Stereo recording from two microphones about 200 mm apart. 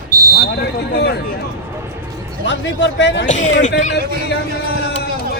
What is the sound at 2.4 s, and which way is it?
Speech, 65° left (ahead or behind).